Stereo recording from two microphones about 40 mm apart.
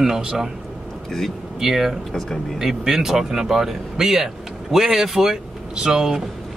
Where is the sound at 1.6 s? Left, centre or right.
Centre.